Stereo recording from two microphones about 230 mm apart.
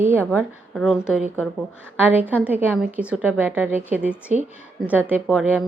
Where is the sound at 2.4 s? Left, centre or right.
Centre.